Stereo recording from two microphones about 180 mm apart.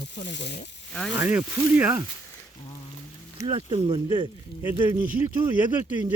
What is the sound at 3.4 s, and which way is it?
Speech, 25° right (ahead or behind).